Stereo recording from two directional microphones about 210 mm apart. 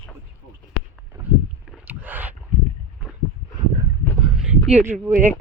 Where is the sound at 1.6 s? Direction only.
5° right (ahead or behind).